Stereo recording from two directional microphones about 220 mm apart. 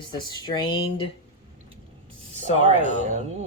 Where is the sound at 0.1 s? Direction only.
20° left (ahead or behind).